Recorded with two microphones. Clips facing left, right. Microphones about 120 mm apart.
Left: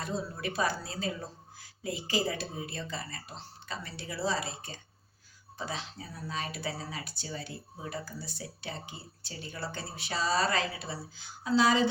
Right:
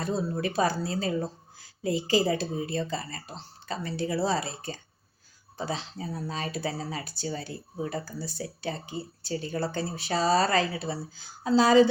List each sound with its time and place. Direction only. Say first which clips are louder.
0.0 s speech: right 6 dB; 35° right (ahead or behind)